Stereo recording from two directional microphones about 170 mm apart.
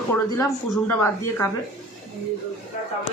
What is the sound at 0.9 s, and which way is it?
Speech, 15° left (ahead or behind).